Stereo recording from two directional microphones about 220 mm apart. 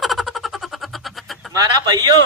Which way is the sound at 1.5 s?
20° right (ahead or behind).